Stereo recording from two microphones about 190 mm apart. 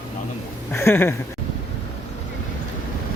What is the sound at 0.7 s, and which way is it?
Speech, 15° left (ahead or behind).